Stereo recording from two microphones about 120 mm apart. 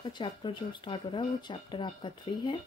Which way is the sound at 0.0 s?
40° left (ahead or behind).